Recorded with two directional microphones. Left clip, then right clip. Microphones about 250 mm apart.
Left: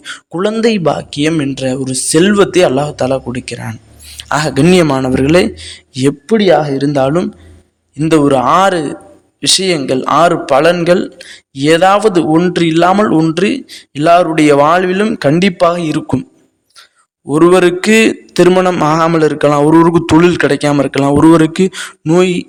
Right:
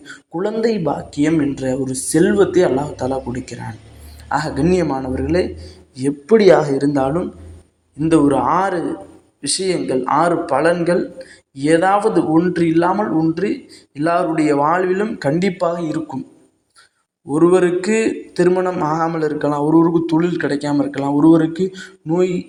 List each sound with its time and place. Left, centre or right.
0.0 s speech: left
17.2 s speech: left